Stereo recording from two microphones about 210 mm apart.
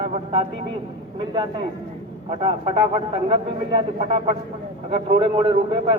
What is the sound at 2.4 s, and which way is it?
A man's voice, 25° right (ahead or behind).